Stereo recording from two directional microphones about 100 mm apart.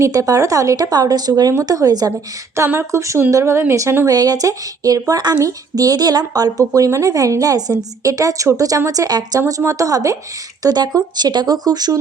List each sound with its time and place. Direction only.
0.0 s speech: 35° right (ahead or behind)
2.6 s speech: 25° right (ahead or behind); by 11.9 s 40° right (ahead or behind)